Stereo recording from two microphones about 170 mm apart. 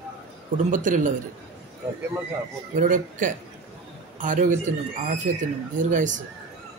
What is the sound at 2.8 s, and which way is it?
A man's voice, 50° right (ahead or behind).